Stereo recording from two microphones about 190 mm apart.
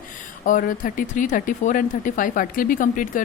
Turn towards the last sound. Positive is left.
turn(degrees=45)  # may be behind; listen again after turning